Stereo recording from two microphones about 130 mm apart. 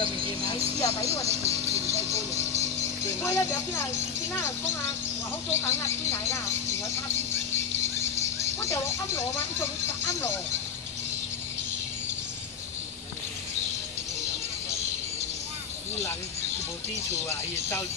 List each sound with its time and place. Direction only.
0.7 s music: 25° left (ahead or behind)
1.2 s a sound: 55° right (ahead or behind)
2.1 s rattle: 55° right (ahead or behind)
3.2 s speech: 20° left (ahead or behind)
6.5 s a sound: 55° right (ahead or behind)
8.4 s speech: 20° left (ahead or behind)
17.3 s speech: 20° left (ahead or behind)